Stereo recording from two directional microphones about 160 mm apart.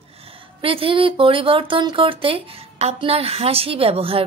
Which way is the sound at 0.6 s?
35° right (ahead or behind).